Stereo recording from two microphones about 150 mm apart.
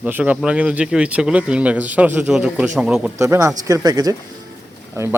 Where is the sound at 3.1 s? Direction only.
20° right (ahead or behind).